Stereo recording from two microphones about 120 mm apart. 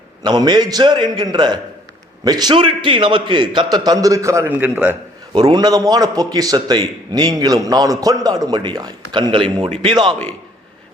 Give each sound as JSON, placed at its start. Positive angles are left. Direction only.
{"t": 0.2, "sound": "a man's voice", "side_deg": -35}
{"t": 5.3, "sound": "a man's voice", "side_deg": -40}